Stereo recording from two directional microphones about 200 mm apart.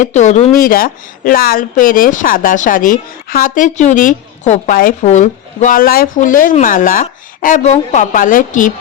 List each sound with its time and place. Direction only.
0.0 s a woman's voice: 35° left (ahead or behind)